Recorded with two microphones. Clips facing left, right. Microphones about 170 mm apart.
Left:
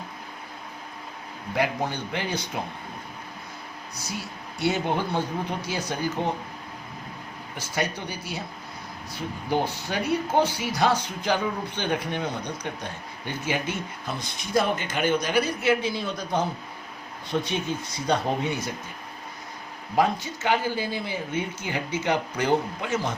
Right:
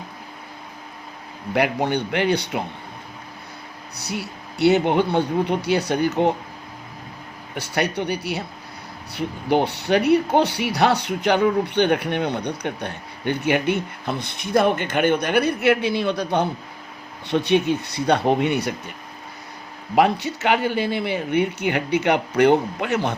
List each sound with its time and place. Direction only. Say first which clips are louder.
1.5 s speech: right 6 dB; 70° right (ahead or behind)
3.9 s speech: right 6 dB; 65° right (ahead or behind)
7.5 s speech: right 6 dB; 65° right (ahead or behind)
20.0 s speech: right 5 dB; 70° right (ahead or behind)